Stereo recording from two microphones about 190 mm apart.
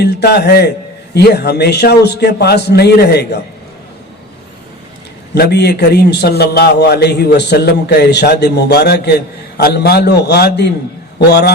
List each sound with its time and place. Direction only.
0.0 s a man's voice: 60° left (ahead or behind)
5.3 s a man's voice: 60° left (ahead or behind)